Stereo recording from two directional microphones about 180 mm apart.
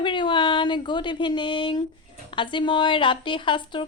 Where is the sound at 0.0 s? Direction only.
25° left (ahead or behind).